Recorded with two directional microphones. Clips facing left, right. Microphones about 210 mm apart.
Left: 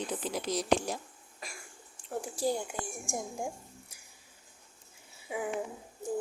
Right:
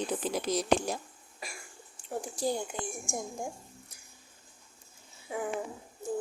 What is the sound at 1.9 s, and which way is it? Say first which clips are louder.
Speech: even; 5° left (ahead or behind).